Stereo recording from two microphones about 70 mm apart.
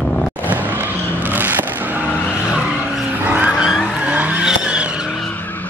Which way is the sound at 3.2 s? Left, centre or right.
Right.